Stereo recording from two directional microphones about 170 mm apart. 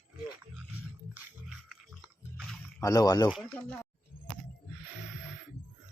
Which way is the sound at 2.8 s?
20° left (ahead or behind).